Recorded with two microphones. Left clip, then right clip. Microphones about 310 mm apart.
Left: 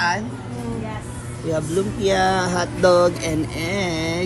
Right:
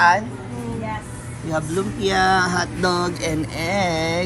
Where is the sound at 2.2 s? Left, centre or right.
Centre.